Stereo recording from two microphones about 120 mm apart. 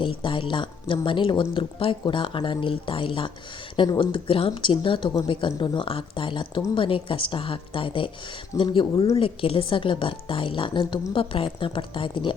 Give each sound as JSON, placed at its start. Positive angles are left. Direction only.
{"t": 0.0, "sound": "speech", "side_deg": 45}